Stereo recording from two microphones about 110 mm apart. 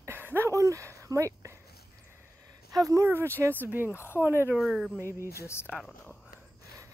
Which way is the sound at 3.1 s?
20° right (ahead or behind).